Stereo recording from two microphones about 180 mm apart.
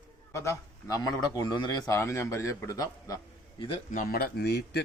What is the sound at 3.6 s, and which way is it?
Speech, 30° left (ahead or behind).